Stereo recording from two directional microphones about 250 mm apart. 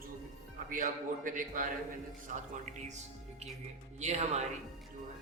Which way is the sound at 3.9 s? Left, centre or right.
Right.